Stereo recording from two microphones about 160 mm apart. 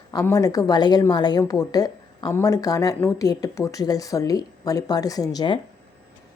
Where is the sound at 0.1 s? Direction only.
20° left (ahead or behind).